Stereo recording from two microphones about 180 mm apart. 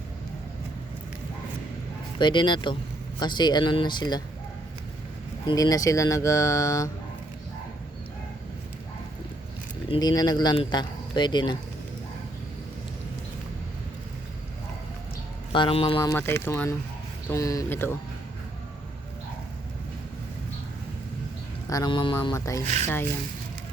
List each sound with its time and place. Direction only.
2.1 s speech: 25° left (ahead or behind)
5.5 s speech: 20° left (ahead or behind)
9.9 s speech: 20° left (ahead or behind)
15.5 s speech: 30° left (ahead or behind)
16.0 s speech: 15° left (ahead or behind)
21.7 s speech: 20° left (ahead or behind)